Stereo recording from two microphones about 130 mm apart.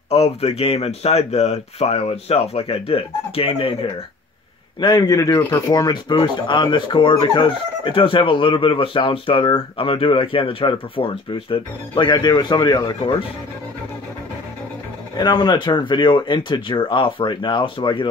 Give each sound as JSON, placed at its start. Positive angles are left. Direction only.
{"t": 0.1, "sound": "speech", "side_deg": 50}
{"t": 4.7, "sound": "a man's voice", "side_deg": 35}
{"t": 15.1, "sound": "speech", "side_deg": 35}